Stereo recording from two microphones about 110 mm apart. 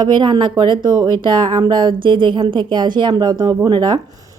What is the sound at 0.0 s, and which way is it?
A woman's voice, 45° right (ahead or behind).